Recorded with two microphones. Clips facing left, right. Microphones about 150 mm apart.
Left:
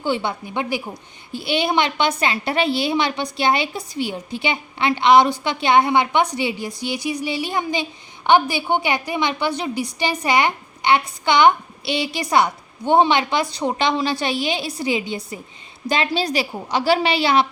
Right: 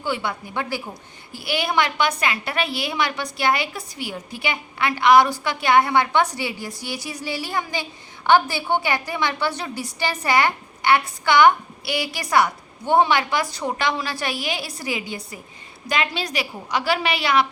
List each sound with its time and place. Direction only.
0.0 s a woman's voice: 25° left (ahead or behind)